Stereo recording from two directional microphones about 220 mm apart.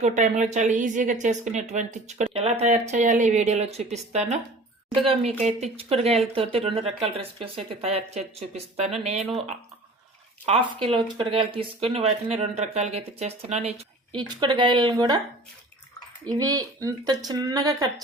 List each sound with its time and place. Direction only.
0.0 s a woman's voice: 30° right (ahead or behind)
5.4 s speech: 30° right (ahead or behind)
10.4 s speech: 25° right (ahead or behind)
16.4 s speech: 15° right (ahead or behind)